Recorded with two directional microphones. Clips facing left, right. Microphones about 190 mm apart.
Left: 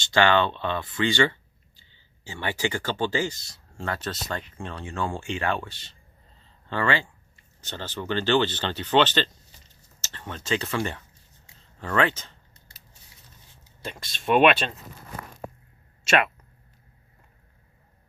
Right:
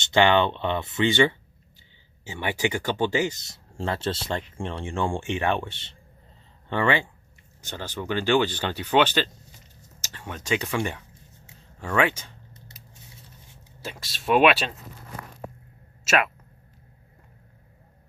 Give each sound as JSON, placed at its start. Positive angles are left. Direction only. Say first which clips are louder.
{"t": 0.0, "sound": "speech", "louder": "right 1 dB", "side_deg": -20}
{"t": 12.6, "sound": "scissors", "louder": "right 7 dB", "side_deg": -20}
{"t": 13.8, "sound": "speech", "louder": "even", "side_deg": -5}
{"t": 16.0, "sound": "speech", "louder": "left 1 dB", "side_deg": 0}